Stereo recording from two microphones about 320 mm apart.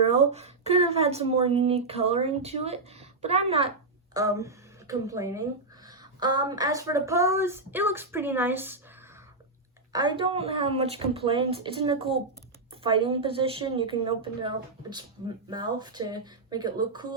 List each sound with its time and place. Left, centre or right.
0.1 s a woman's voice: centre
9.9 s speech: centre